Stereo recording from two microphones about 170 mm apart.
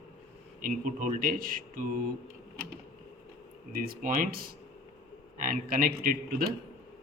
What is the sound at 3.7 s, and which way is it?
Speech, 60° right (ahead or behind).